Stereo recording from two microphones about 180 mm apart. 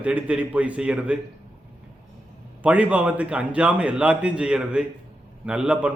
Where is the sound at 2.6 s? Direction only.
10° right (ahead or behind).